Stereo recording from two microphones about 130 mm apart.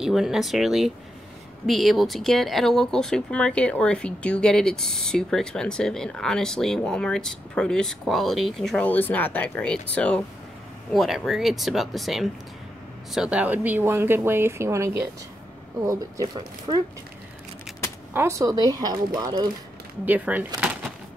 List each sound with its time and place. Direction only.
0.0 s speech: 5° right (ahead or behind)
8.8 s speech: 15° left (ahead or behind)
10.9 s speech: centre (ahead or behind); by 16.3 s 20° right (ahead or behind)
16.3 s speech: 35° right (ahead or behind)
18.1 s speech: 25° right (ahead or behind)
20.1 s speech: 10° right (ahead or behind)